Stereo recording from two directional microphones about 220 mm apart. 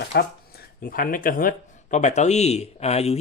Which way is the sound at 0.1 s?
45° left (ahead or behind).